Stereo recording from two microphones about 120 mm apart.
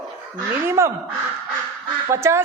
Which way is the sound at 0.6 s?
25° right (ahead or behind).